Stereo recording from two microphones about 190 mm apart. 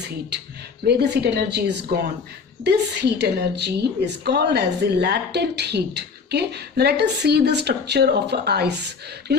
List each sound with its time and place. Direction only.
0.9 s a woman's voice: 60° right (ahead or behind)